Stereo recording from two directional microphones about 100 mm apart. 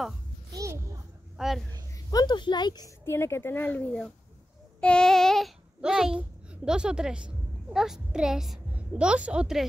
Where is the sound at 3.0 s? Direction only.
25° left (ahead or behind).